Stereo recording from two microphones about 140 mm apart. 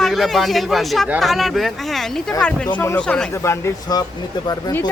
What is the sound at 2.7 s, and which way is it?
Speech, 10° left (ahead or behind).